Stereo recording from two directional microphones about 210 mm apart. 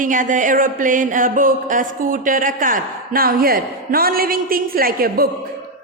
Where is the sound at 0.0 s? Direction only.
40° right (ahead or behind).